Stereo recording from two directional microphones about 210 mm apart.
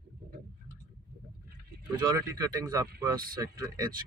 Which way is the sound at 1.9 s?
20° right (ahead or behind).